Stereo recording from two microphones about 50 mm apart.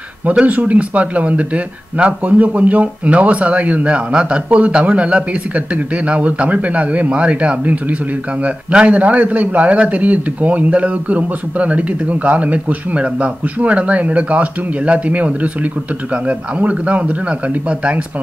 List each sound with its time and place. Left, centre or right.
0.5 s speech: right